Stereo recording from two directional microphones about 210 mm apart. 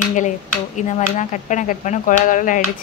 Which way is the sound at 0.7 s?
35° left (ahead or behind).